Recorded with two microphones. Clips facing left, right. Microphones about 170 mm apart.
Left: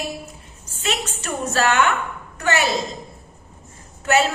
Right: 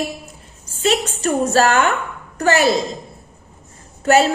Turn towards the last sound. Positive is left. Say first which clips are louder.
# right 5 dB
turn(degrees=-35)  # may be behind; listen again after turning